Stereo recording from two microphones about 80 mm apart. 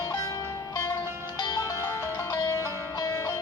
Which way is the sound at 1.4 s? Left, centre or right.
Left.